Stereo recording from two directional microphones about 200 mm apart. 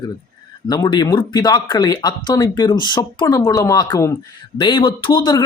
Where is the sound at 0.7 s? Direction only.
20° left (ahead or behind).